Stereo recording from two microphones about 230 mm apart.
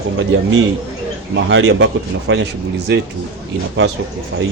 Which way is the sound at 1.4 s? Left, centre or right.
Right.